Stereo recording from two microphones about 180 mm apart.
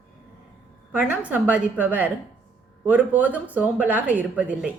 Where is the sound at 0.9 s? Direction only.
10° right (ahead or behind).